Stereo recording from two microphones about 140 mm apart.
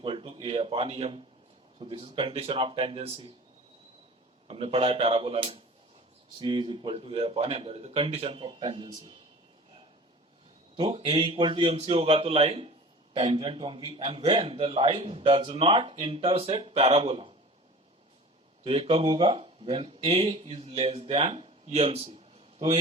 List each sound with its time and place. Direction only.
0.0 s a man's voice: 40° right (ahead or behind)
4.4 s a man's voice: 40° right (ahead or behind)
10.8 s a man's voice: 40° right (ahead or behind)
18.6 s speech: 40° right (ahead or behind)
20.3 s a man's voice: 45° right (ahead or behind)